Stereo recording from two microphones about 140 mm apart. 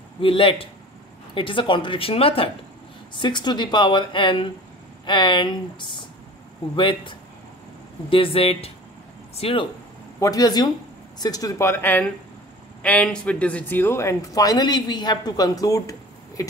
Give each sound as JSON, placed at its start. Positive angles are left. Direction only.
{"t": 0.2, "sound": "speech", "side_deg": 40}
{"t": 10.2, "sound": "speech", "side_deg": 25}